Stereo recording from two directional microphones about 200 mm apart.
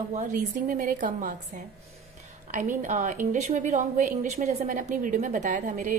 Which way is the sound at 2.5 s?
40° right (ahead or behind).